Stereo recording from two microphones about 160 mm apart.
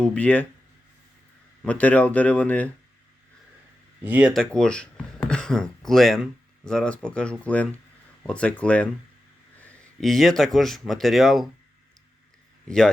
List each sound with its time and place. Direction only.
0.0 s speech: 10° left (ahead or behind)
1.6 s speech: 10° left (ahead or behind)
4.0 s speech: 10° right (ahead or behind)
4.5 s speech: 5° left (ahead or behind)
12.6 s a man's voice: 5° left (ahead or behind)